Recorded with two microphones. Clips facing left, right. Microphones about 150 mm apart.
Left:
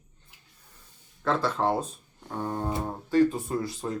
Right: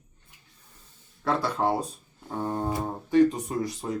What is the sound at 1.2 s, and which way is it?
Speech, 10° right (ahead or behind).